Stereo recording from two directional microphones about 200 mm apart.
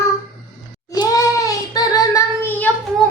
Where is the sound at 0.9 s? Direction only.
20° left (ahead or behind).